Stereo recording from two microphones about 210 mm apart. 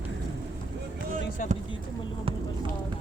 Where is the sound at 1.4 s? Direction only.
40° left (ahead or behind).